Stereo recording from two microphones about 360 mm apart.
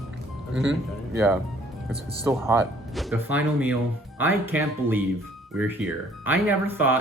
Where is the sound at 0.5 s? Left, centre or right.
Right.